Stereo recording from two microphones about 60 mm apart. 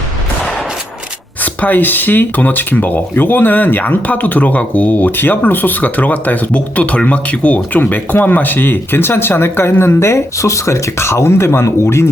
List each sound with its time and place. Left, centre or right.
1.6 s speech: left